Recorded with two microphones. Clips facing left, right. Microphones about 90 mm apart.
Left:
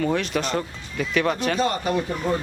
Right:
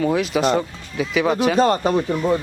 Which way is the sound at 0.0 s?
5° right (ahead or behind).